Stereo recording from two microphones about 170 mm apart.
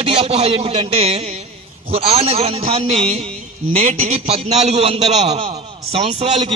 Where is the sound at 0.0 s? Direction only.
35° right (ahead or behind).